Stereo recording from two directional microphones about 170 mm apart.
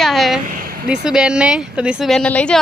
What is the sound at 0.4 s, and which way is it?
Vehicle, 55° right (ahead or behind).